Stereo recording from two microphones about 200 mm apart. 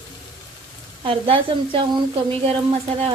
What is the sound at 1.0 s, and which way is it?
Speech, 25° right (ahead or behind).